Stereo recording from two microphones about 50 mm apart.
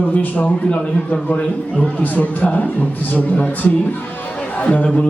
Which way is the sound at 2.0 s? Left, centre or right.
Left.